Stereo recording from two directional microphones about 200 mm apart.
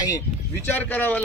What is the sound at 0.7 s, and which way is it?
Speech, 10° left (ahead or behind).